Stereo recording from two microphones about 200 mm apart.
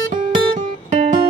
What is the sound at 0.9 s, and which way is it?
Music, 40° right (ahead or behind).